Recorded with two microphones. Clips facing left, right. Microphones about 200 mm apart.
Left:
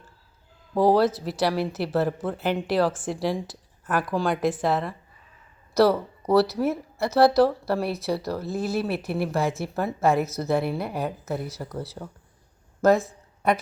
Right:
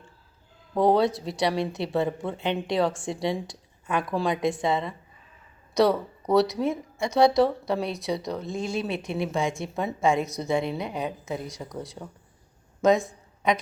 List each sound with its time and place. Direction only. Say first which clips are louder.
0.7 s a woman's voice: left 2 dB; 5° left (ahead or behind)